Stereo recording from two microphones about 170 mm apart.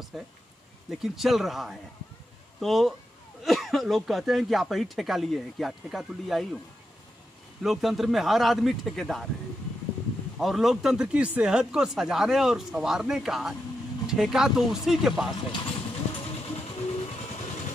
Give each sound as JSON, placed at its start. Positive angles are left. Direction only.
{"t": 0.1, "sound": "speech", "side_deg": 0}
{"t": 7.6, "sound": "speech", "side_deg": 0}
{"t": 10.4, "sound": "speech", "side_deg": 0}
{"t": 15.3, "sound": "vehicle", "side_deg": 30}